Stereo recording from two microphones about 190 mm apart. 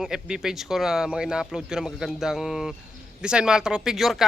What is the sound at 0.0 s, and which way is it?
Speech, 5° right (ahead or behind).